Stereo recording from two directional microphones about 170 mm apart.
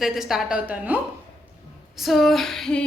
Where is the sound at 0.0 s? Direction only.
Centre (ahead or behind).